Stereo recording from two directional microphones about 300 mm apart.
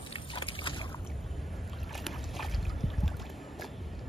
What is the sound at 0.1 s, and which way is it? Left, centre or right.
Boat, centre.